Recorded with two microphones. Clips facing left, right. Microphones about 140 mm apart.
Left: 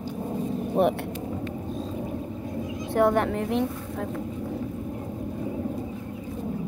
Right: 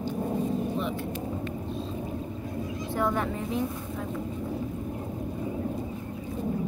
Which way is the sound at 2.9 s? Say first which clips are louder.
Left 7 dB; 65° left (ahead or behind).